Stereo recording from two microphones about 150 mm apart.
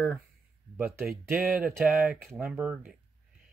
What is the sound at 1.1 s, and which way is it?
Speech, 5° right (ahead or behind).